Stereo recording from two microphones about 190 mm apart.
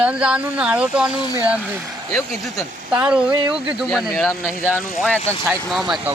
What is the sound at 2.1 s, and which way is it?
Speech, centre (ahead or behind).